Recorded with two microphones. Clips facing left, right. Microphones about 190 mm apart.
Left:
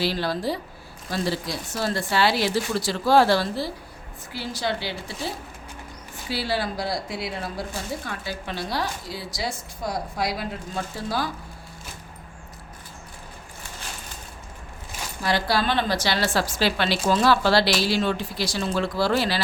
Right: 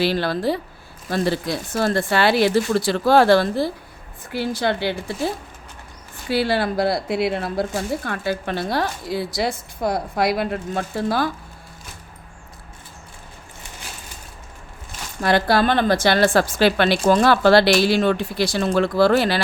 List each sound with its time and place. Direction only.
0.0 s speech: 60° right (ahead or behind)
6.2 s speech: 55° right (ahead or behind)
15.2 s speech: 55° right (ahead or behind)